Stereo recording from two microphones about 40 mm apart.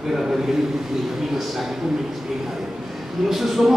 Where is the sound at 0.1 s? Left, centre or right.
Centre.